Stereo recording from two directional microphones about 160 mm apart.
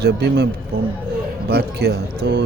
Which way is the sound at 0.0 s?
90° right.